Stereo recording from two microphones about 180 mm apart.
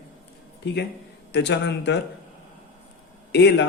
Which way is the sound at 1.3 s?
70° left (ahead or behind).